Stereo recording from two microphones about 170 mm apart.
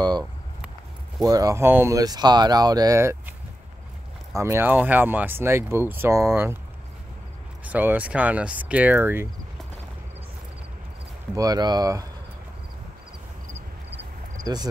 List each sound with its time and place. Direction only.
0.0 s a sound: 25° right (ahead or behind)
1.2 s speech: 20° right (ahead or behind)
4.4 s speech: 15° right (ahead or behind)
7.6 s speech: 10° right (ahead or behind)
11.3 s speech: 20° right (ahead or behind)
14.4 s speech: 25° right (ahead or behind)